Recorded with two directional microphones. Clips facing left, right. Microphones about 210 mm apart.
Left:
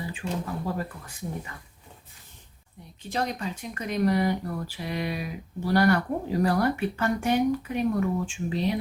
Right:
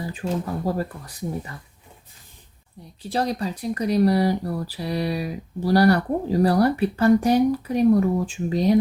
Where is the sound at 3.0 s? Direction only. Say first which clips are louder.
Right 5 dB; 35° right (ahead or behind).